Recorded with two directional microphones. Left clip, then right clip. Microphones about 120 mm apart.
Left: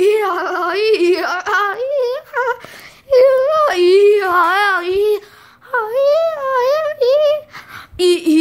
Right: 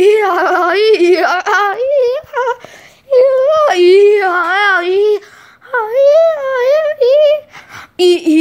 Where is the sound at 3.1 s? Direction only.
15° left (ahead or behind).